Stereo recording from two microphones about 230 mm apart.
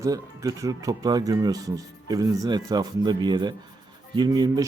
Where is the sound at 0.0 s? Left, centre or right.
Centre.